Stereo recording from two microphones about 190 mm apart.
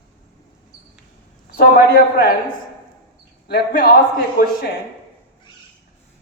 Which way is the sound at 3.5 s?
50° left (ahead or behind).